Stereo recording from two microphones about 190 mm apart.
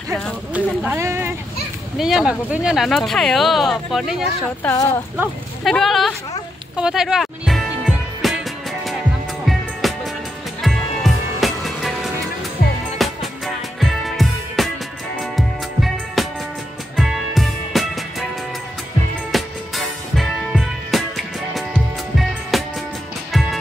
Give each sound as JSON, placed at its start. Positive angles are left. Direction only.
{"t": 0.1, "sound": "speech", "side_deg": -5}
{"t": 2.0, "sound": "speech", "side_deg": 0}
{"t": 4.6, "sound": "speech", "side_deg": 15}
{"t": 5.6, "sound": "speech", "side_deg": 0}
{"t": 6.8, "sound": "music", "side_deg": -5}
{"t": 9.5, "sound": "music", "side_deg": 0}
{"t": 19.3, "sound": "music", "side_deg": 0}